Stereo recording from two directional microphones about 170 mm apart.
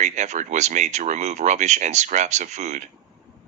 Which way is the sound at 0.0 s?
45° right (ahead or behind).